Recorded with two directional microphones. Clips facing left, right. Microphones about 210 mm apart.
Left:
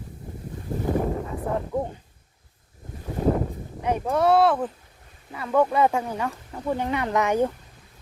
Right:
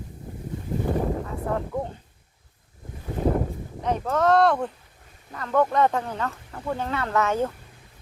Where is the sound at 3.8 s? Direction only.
10° left (ahead or behind).